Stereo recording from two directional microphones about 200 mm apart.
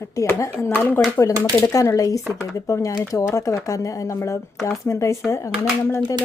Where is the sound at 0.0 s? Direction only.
15° left (ahead or behind).